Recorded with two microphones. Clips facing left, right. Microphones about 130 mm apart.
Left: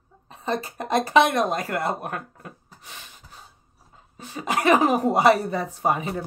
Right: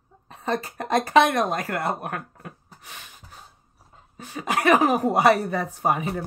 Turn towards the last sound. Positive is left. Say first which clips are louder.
# even
turn(degrees=30)  # may be behind; listen again after turning